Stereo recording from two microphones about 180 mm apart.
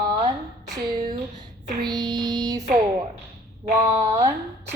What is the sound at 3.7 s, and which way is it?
Speech, 15° right (ahead or behind).